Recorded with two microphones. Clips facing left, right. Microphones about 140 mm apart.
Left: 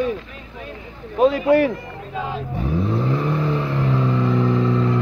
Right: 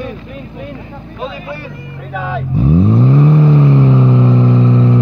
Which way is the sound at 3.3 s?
25° right (ahead or behind).